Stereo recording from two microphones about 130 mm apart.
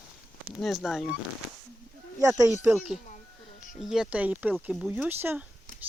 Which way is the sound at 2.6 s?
5° right (ahead or behind).